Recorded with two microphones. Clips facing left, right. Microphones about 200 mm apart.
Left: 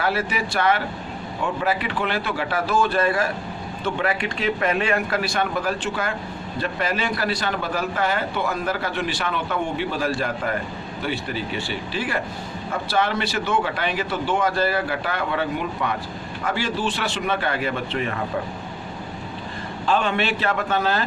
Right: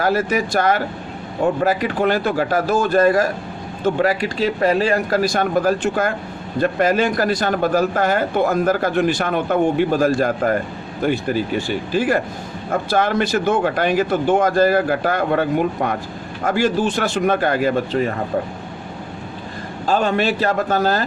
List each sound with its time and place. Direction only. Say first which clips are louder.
0.0 s a man's voice: right 6 dB; 45° right (ahead or behind)
19.8 s speech: right 4 dB; 40° right (ahead or behind)